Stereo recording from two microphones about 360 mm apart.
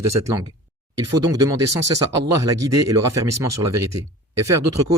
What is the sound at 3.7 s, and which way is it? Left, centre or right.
Speech, right.